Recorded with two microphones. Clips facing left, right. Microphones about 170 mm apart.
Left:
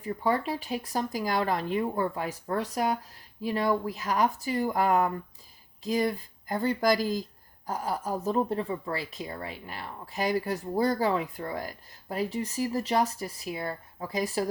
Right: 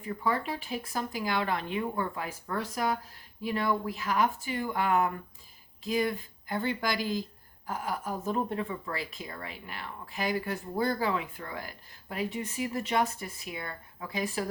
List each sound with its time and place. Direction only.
0.0 s a woman's voice: 35° left (ahead or behind)